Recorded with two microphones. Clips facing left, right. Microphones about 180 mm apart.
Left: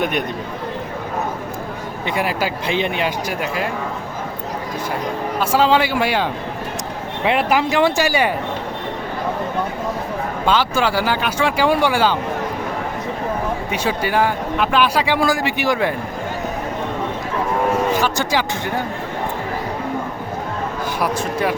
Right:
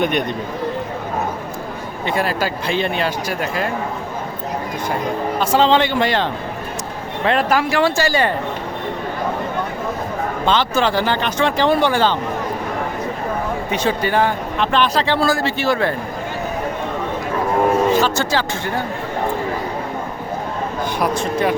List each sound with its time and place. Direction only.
0.0 s speech: 5° left (ahead or behind)
2.0 s speech: 15° left (ahead or behind)
5.4 s speech: 5° left (ahead or behind)
7.3 s speech: 15° left (ahead or behind)
10.4 s speech: 10° left (ahead or behind)
13.7 s speech: 10° left (ahead or behind)
17.9 s speech: 15° left (ahead or behind)
21.0 s speech: 5° left (ahead or behind)